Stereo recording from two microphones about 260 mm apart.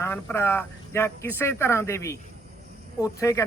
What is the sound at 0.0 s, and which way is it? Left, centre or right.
Speech, centre.